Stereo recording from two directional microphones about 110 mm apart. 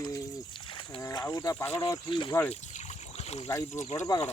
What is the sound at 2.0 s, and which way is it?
Speech, 45° left (ahead or behind).